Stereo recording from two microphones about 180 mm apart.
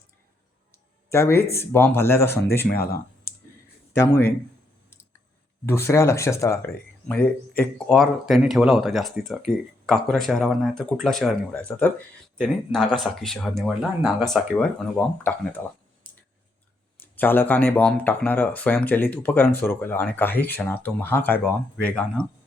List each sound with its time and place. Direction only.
1.1 s speech: 15° left (ahead or behind)
2.7 s a sound: 60° left (ahead or behind)
3.9 s speech: 15° left (ahead or behind)
5.6 s speech: 15° left (ahead or behind)
17.0 s speech: 10° left (ahead or behind)